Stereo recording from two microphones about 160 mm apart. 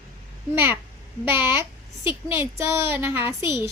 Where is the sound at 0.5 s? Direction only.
15° right (ahead or behind).